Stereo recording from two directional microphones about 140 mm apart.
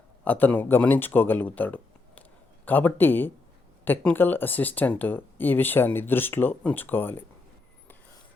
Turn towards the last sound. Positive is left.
turn(degrees=15)  # may be behind; listen again after turning